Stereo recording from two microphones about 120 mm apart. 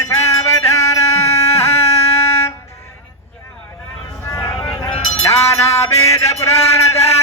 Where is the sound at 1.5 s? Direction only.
60° left (ahead or behind).